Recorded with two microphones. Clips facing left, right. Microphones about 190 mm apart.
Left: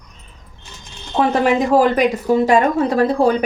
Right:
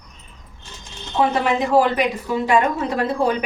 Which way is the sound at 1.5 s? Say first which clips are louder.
Left 3 dB; 45° left (ahead or behind).